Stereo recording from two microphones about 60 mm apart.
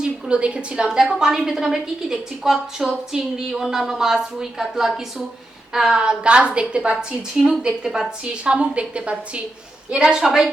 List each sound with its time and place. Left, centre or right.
0.0 s a woman's voice: centre
7.7 s a woman's voice: centre
8.4 s a woman's voice: centre